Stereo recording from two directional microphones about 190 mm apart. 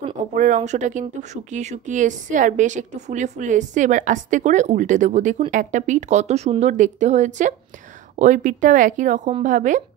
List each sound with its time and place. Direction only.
0.3 s speech: 40° right (ahead or behind)